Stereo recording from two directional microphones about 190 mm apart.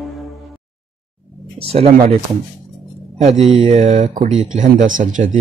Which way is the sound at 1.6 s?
30° right (ahead or behind).